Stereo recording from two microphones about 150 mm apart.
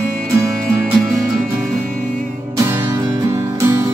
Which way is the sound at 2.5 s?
20° right (ahead or behind).